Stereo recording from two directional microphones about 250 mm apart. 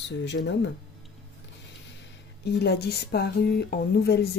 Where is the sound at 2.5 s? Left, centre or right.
Left.